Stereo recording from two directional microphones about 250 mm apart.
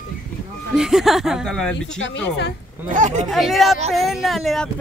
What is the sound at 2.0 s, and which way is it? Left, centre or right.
Speech, left.